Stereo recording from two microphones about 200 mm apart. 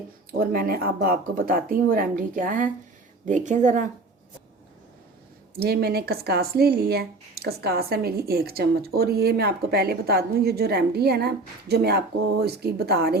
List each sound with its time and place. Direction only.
0.3 s speech: 50° right (ahead or behind)
5.5 s speech: 50° right (ahead or behind)